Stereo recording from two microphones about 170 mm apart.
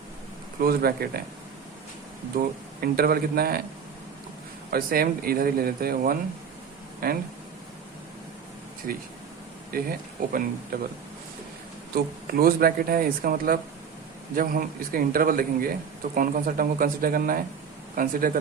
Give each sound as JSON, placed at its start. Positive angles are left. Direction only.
{"t": 0.6, "sound": "speech", "side_deg": -60}
{"t": 2.3, "sound": "speech", "side_deg": -60}
{"t": 4.7, "sound": "speech", "side_deg": -60}
{"t": 9.7, "sound": "speech", "side_deg": -55}
{"t": 11.9, "sound": "speech", "side_deg": -60}